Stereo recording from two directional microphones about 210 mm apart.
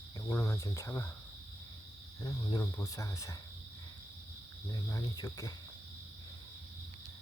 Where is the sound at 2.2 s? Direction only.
15° left (ahead or behind).